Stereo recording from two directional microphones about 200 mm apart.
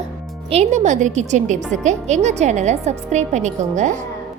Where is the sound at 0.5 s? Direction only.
35° right (ahead or behind).